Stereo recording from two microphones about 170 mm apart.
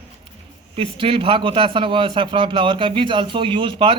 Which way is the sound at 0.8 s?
30° right (ahead or behind).